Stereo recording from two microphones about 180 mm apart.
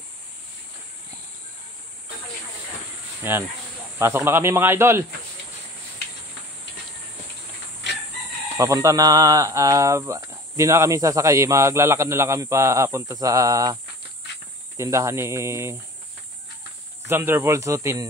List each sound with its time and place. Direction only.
3.3 s speech: 15° right (ahead or behind)
8.5 s speech: 20° right (ahead or behind)
14.8 s speech: 15° right (ahead or behind)
17.1 s speech: 15° right (ahead or behind)